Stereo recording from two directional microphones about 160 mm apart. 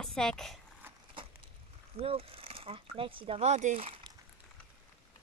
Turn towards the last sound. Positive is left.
turn(degrees=-45)  # may be behind; listen again after turning